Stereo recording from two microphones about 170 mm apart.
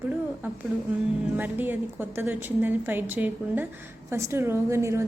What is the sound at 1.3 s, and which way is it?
A woman's voice, 10° right (ahead or behind).